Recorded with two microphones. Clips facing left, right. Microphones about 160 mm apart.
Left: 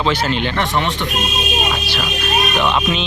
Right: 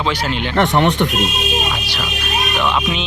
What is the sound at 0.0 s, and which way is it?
Speech, 10° right (ahead or behind).